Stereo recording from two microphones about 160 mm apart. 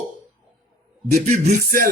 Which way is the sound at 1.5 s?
60° right (ahead or behind).